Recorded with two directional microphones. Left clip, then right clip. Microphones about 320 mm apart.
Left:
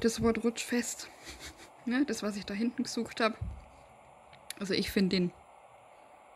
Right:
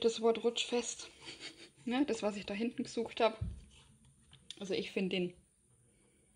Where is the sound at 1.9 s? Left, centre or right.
Centre.